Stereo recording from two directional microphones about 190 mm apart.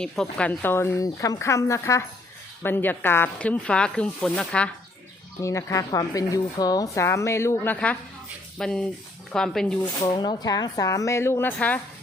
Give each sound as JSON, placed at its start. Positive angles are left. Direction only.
{"t": 0.0, "sound": "speech", "side_deg": 5}
{"t": 5.4, "sound": "speech", "side_deg": 15}
{"t": 10.0, "sound": "speech", "side_deg": 20}